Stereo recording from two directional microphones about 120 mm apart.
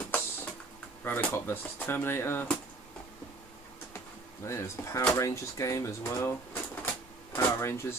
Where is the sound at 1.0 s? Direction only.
15° left (ahead or behind).